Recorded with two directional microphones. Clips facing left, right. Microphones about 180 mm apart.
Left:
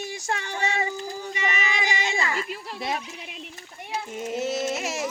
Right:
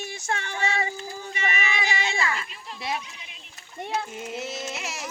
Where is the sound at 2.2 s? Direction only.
20° left (ahead or behind).